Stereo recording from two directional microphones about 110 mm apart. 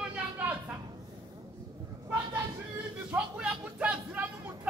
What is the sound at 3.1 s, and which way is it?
Speech, 10° right (ahead or behind).